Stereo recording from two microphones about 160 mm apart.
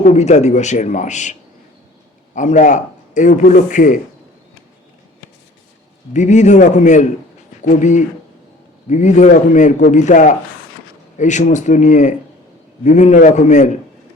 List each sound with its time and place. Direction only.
0.0 s a man's voice: 45° left (ahead or behind)
6.1 s a man's voice: 50° left (ahead or behind)